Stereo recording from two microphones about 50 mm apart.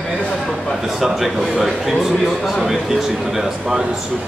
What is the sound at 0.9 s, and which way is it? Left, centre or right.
Speech, centre.